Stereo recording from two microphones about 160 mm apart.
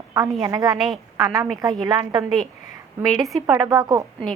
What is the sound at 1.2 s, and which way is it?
A woman's voice, 20° right (ahead or behind).